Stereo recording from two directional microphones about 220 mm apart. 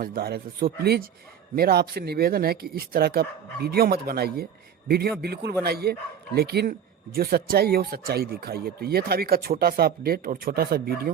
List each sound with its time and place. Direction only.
0.0 s speech: 40° right (ahead or behind)